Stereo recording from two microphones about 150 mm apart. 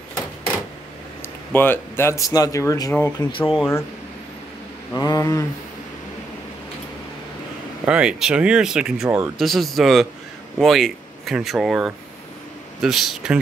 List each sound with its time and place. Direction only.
1.5 s speech: 15° left (ahead or behind)
3.3 s speech: 35° left (ahead or behind)
4.9 s speech: 25° left (ahead or behind)
7.8 s speech: 5° right (ahead or behind)